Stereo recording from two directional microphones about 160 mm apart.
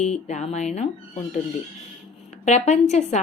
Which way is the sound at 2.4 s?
45° left (ahead or behind).